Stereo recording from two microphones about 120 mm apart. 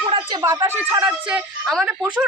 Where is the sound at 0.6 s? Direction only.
20° right (ahead or behind).